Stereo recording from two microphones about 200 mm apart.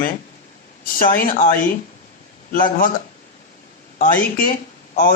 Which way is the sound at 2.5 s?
45° left (ahead or behind).